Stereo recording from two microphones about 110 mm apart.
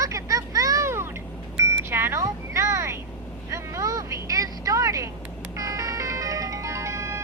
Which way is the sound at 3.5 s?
30° right (ahead or behind).